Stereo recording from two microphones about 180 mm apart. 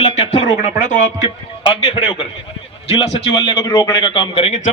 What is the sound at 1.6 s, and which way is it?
A man's voice, 30° left (ahead or behind).